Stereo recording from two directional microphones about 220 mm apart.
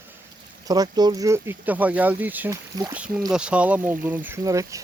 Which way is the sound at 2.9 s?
5° right (ahead or behind).